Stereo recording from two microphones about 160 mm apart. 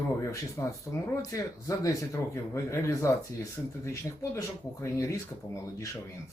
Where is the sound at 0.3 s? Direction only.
20° left (ahead or behind).